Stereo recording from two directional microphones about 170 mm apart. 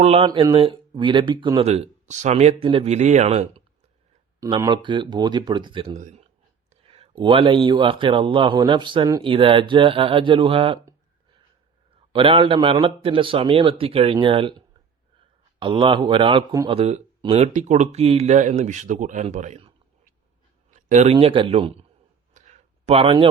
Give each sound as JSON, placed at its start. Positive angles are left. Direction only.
{"t": 0.0, "sound": "speech", "side_deg": -35}
{"t": 4.4, "sound": "a man's voice", "side_deg": -30}
{"t": 6.0, "sound": "speech", "side_deg": -45}
{"t": 6.8, "sound": "a man's voice", "side_deg": -35}
{"t": 12.1, "sound": "speech", "side_deg": -30}
{"t": 15.5, "sound": "a man's voice", "side_deg": -30}
{"t": 22.4, "sound": "a sound", "side_deg": -45}